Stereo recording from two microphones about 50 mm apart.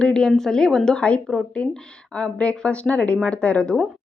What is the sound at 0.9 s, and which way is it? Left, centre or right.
A woman's voice, left.